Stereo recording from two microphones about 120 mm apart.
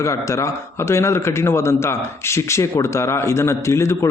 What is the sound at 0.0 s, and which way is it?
A man's voice, 25° left (ahead or behind).